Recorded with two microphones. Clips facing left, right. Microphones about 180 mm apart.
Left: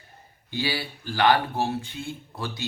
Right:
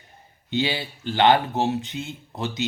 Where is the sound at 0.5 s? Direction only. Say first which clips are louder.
Right 4 dB; 20° right (ahead or behind).